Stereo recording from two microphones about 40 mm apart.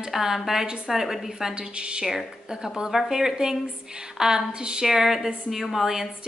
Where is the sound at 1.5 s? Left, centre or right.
Right.